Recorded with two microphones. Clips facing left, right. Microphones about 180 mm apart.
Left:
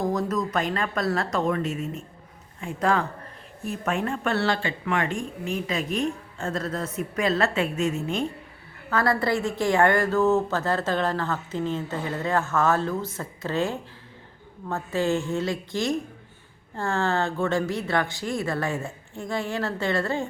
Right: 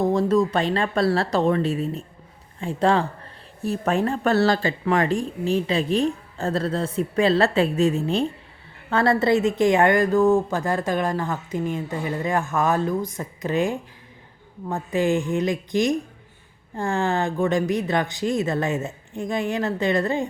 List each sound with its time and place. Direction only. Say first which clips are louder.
0.0 s a woman's voice: right 6 dB; 25° right (ahead or behind)